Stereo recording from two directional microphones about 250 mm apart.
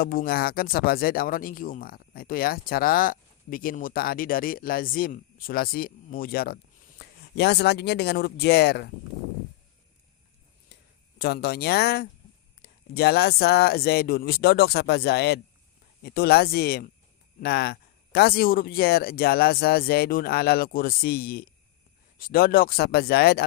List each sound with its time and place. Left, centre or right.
0.0 s speech: left
11.2 s speech: left